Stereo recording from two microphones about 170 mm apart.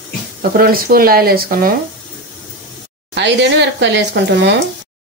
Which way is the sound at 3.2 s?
90° right.